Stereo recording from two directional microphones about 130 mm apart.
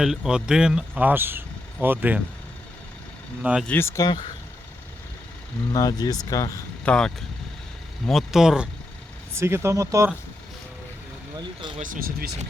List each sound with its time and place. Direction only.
0.0 s speech: 5° right (ahead or behind)
3.4 s speech: 5° right (ahead or behind)
3.7 s speech: 20° left (ahead or behind)
5.7 s speech: 30° left (ahead or behind)
6.8 s speech: 5° left (ahead or behind)
9.3 s speech: 20° right (ahead or behind)
11.3 s speech: 35° right (ahead or behind)
11.8 s speech: 90° right